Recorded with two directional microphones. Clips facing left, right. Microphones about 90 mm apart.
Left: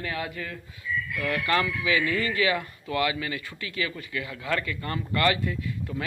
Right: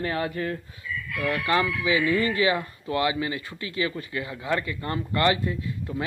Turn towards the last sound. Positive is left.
turn(degrees=-25)  # may be behind; listen again after turning